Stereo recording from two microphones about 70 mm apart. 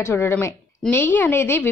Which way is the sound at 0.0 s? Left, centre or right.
Left.